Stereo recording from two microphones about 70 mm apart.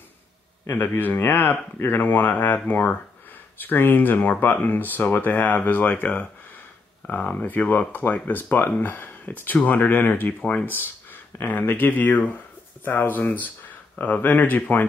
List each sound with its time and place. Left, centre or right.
0.7 s speech: left